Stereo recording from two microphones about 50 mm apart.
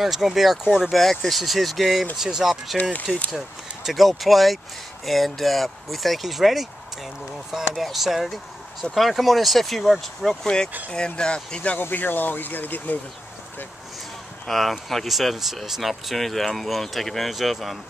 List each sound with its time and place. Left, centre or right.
0.0 s speech: centre
0.9 s speech: centre
7.7 s speech: centre
10.4 s speech: centre
11.8 s speech: left
14.5 s speech: centre